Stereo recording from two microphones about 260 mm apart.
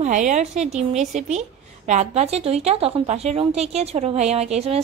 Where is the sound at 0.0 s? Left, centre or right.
Right.